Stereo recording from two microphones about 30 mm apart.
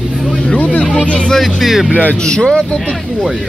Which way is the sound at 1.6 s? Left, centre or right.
Centre.